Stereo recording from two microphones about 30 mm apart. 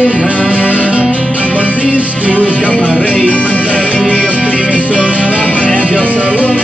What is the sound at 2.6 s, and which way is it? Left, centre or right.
Music, left.